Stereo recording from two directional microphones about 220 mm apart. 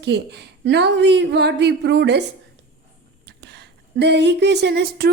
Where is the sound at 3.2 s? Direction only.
50° right (ahead or behind).